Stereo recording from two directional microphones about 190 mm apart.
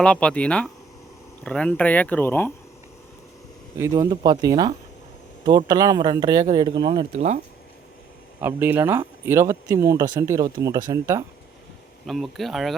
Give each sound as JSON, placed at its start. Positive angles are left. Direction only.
{"t": 0.0, "sound": "speech", "side_deg": 5}
{"t": 3.8, "sound": "speech", "side_deg": -15}
{"t": 7.1, "sound": "speech", "side_deg": -35}
{"t": 8.4, "sound": "speech", "side_deg": -10}
{"t": 12.0, "sound": "speech", "side_deg": 0}